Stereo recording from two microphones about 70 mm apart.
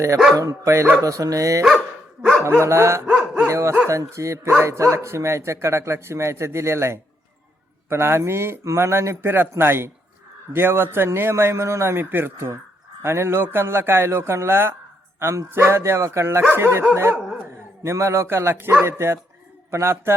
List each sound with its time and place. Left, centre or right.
0.3 s speech: right
3.4 s dog: right
3.8 s a man's voice: right